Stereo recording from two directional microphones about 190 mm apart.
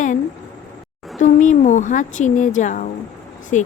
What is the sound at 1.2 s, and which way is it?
A woman's voice, 40° left (ahead or behind).